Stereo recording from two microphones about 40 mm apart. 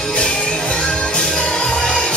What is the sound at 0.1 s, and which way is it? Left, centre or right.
Music, left.